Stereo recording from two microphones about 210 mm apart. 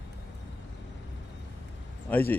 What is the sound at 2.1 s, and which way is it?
Speech, 10° left (ahead or behind).